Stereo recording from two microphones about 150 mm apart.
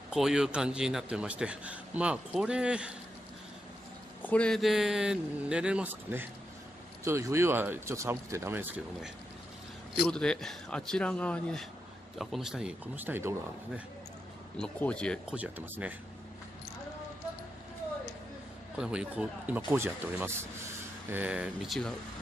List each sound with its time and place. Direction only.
0.1 s a man's voice: 5° right (ahead or behind)
4.2 s a man's voice: 10° left (ahead or behind); by 8.8 s 15° right (ahead or behind)
9.9 s speech: 5° left (ahead or behind); by 13.3 s 15° right (ahead or behind)
14.6 s speech: 5° left (ahead or behind)
15.2 s a man's voice: 10° right (ahead or behind)
18.8 s a man's voice: 5° right (ahead or behind)